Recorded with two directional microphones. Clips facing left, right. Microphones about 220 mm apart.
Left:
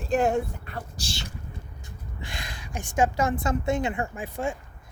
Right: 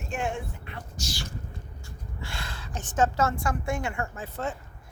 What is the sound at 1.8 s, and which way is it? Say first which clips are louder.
Speech: right 1 dB; 15° left (ahead or behind).